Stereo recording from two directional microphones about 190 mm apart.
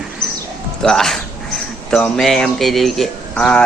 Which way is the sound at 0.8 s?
Centre (ahead or behind).